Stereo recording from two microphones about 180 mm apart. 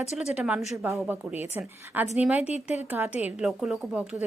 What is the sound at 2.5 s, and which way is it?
Speech, 40° left (ahead or behind).